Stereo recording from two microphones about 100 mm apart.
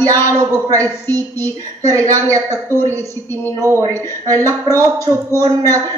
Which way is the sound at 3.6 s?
35° right (ahead or behind).